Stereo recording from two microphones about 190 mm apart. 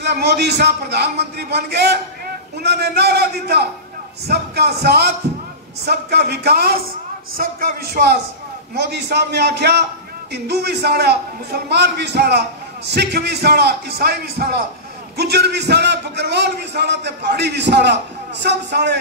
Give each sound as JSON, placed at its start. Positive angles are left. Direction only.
{"t": 0.0, "sound": "a man's voice", "side_deg": -60}